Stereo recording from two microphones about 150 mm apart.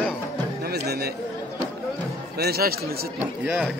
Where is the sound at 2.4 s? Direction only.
90° right.